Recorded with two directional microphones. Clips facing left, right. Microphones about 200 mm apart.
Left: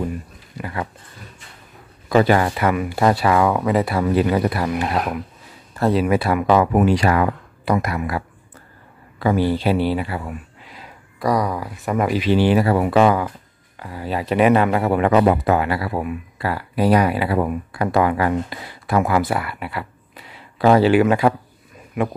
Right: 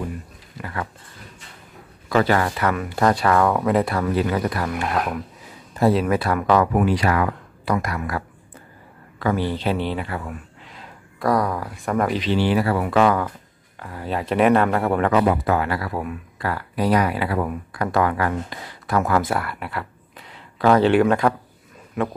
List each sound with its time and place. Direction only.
0.6 s a sound: 15° left (ahead or behind)
2.0 s speech: 15° left (ahead or behind)
4.0 s speech: 15° left (ahead or behind)
5.8 s speech: 5° right (ahead or behind)
6.0 s speech: 10° left (ahead or behind)
9.2 s speech: 10° left (ahead or behind)
13.7 s speech: 5° left (ahead or behind)
15.0 s speech: 25° left (ahead or behind)